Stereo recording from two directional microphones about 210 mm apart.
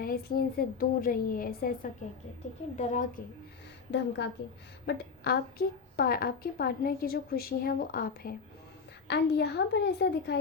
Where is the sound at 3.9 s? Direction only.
55° left (ahead or behind).